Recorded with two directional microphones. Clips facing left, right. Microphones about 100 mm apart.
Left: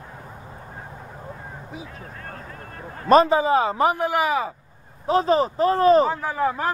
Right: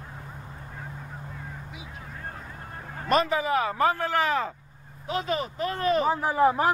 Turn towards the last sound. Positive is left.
turn(degrees=-20)  # may be behind; listen again after turning